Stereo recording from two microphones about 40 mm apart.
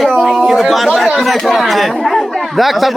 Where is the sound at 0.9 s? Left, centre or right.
Centre.